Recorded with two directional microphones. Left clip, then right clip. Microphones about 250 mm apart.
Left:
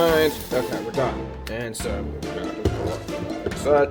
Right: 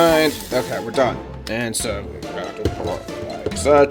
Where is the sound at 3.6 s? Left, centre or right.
Right.